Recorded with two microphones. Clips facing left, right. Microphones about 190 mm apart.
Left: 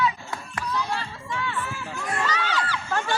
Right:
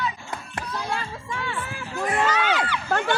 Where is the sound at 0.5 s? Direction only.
50° right (ahead or behind).